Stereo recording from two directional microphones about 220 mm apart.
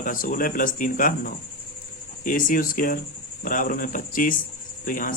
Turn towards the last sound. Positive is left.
turn(degrees=40)  # may be behind; listen again after turning